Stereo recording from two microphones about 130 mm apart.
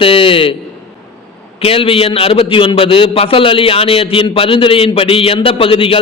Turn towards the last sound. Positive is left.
turn(degrees=45)  # may be behind; listen again after turning